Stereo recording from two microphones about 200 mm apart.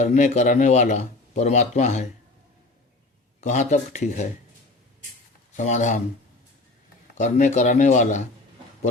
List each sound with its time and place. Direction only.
0.0 s speech: 35° left (ahead or behind)
3.4 s speech: 35° left (ahead or behind)
5.5 s speech: 35° left (ahead or behind)
7.2 s speech: 35° left (ahead or behind)